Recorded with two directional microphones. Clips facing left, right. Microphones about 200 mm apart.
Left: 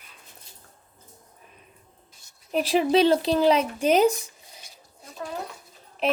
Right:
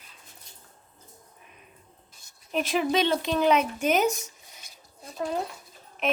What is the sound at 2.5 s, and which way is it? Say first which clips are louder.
Speech: left 4 dB; 35° left (ahead or behind).